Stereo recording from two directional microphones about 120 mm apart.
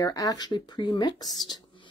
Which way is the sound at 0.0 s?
30° left (ahead or behind).